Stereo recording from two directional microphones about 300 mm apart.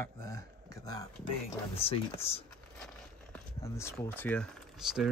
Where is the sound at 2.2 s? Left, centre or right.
Centre.